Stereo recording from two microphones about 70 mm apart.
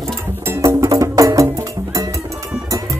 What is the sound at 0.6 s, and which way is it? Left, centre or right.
Music, right.